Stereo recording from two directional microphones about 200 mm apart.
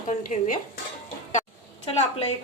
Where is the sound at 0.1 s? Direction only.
35° left (ahead or behind).